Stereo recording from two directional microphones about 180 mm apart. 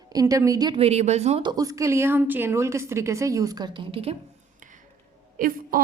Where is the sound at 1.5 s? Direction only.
20° right (ahead or behind).